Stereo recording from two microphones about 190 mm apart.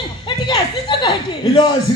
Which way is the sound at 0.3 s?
25° left (ahead or behind).